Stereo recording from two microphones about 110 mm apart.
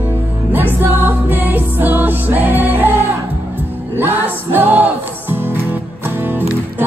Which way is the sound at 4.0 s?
20° right (ahead or behind).